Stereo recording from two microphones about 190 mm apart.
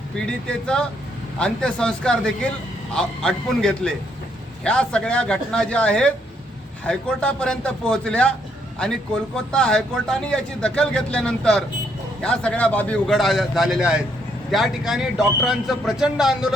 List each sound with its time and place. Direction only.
0.3 s speech: 5° left (ahead or behind)